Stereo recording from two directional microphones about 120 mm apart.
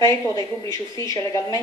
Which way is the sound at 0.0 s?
30° left (ahead or behind).